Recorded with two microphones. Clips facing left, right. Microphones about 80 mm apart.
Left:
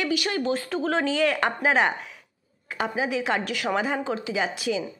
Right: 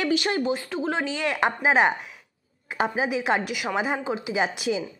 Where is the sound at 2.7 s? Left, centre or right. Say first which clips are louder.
Right 1 dB; right.